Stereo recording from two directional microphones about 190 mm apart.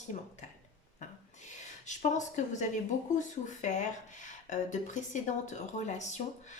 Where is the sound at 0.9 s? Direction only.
40° left (ahead or behind).